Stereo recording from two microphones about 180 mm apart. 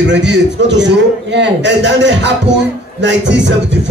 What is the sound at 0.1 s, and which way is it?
A man's voice, 75° right (ahead or behind).